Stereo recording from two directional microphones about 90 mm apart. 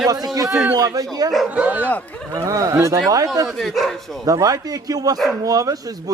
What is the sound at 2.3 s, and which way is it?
Speech, 40° right (ahead or behind).